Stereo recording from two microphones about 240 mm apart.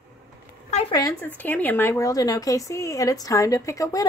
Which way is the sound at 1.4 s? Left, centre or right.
Centre.